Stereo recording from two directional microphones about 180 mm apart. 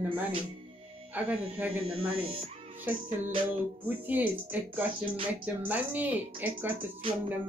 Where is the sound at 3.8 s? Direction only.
10° right (ahead or behind).